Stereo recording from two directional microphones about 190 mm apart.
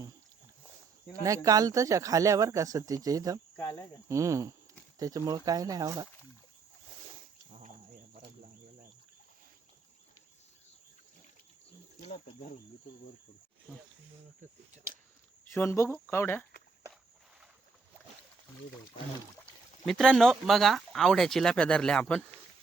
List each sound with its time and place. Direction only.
1.2 s speech: 15° right (ahead or behind)
3.5 s speech: 10° left (ahead or behind)
4.1 s speech: 15° right (ahead or behind)
12.0 s speech: 35° left (ahead or behind)
15.5 s speech: 15° left (ahead or behind)
19.8 s speech: centre (ahead or behind)